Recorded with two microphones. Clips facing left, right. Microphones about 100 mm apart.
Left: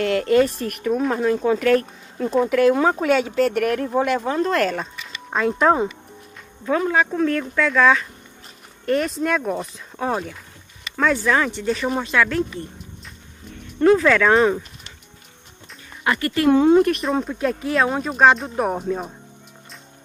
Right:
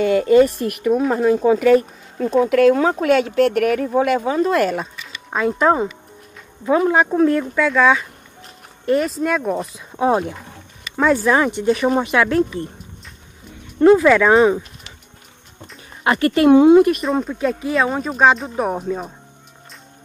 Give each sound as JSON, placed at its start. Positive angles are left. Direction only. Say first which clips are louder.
{"t": 0.0, "sound": "speech", "louder": "right 4 dB", "side_deg": -5}
{"t": 6.6, "sound": "speech", "louder": "right 4 dB", "side_deg": -15}
{"t": 7.5, "sound": "speech", "louder": "right 2 dB", "side_deg": -5}
{"t": 11.2, "sound": "speech", "louder": "right 4 dB", "side_deg": -15}
{"t": 13.7, "sound": "speech", "louder": "right 4 dB", "side_deg": -10}
{"t": 16.0, "sound": "speech", "louder": "right 5 dB", "side_deg": -25}
{"t": 16.6, "sound": "speech", "louder": "right 4 dB", "side_deg": -5}